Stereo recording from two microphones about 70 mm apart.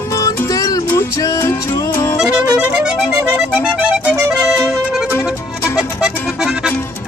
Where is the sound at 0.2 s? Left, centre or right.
Left.